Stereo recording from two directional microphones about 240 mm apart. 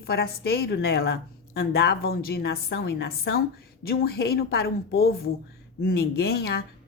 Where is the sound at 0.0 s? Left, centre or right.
Left.